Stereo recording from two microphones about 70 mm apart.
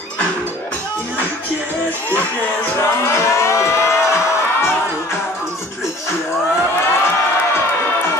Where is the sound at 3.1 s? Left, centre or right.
Left.